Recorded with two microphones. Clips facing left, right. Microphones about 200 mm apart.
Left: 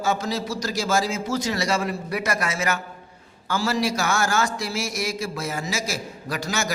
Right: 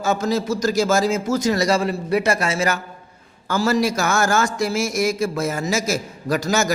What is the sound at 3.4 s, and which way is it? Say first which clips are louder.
A man's voice: right 5 dB; 45° right (ahead or behind).